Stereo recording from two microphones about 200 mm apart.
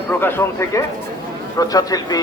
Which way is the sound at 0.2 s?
10° left (ahead or behind).